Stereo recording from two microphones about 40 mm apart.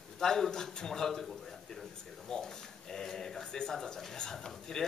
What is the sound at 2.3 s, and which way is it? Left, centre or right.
A man's voice, centre.